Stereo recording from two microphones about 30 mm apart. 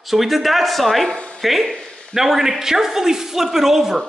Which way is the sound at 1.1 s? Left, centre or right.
Left.